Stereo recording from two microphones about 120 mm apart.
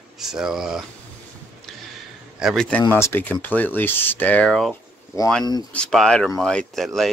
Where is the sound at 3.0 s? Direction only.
15° left (ahead or behind).